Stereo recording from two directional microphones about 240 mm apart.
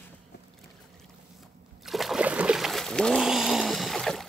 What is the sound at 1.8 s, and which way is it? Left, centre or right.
Splash, centre.